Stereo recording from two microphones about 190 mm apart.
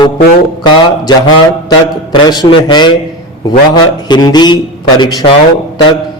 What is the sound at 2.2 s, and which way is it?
Speech, 20° left (ahead or behind).